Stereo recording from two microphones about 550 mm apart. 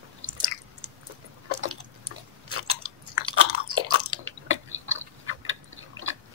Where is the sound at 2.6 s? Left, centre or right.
Right.